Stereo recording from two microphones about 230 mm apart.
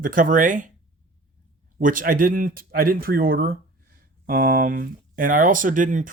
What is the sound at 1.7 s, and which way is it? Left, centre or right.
Speech, right.